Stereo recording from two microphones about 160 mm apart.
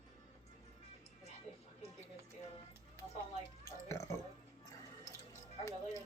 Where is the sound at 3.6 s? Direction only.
20° left (ahead or behind).